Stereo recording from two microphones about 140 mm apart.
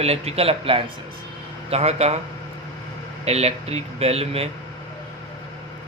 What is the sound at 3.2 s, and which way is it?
Speech, 50° right (ahead or behind).